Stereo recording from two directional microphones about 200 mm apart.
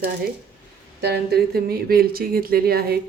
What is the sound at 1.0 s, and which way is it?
Speech, 55° right (ahead or behind).